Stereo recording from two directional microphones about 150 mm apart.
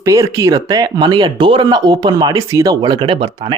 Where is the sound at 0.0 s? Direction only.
20° right (ahead or behind).